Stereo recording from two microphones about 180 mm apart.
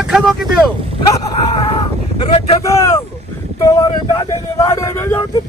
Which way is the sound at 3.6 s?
20° left (ahead or behind).